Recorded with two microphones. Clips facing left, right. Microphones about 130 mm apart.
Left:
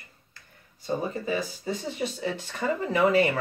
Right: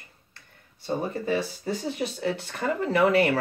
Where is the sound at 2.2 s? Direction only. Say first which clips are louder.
Right 2 dB; 60° right (ahead or behind).